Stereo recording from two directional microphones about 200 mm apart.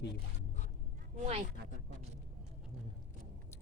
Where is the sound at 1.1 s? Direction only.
30° right (ahead or behind).